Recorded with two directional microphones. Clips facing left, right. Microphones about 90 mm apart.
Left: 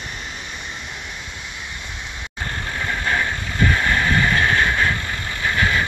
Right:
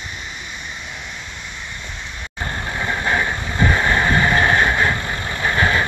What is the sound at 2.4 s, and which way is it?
Vehicle, 20° right (ahead or behind).